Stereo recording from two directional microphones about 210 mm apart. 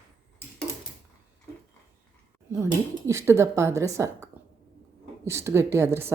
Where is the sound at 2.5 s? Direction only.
15° right (ahead or behind).